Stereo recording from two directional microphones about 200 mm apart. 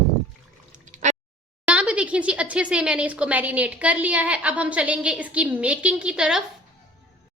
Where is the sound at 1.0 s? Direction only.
35° right (ahead or behind).